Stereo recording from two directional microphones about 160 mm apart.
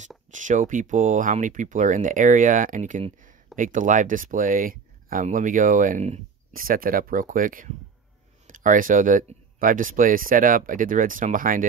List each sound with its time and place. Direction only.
0.3 s speech: 50° right (ahead or behind)
6.5 s speech: 60° right (ahead or behind)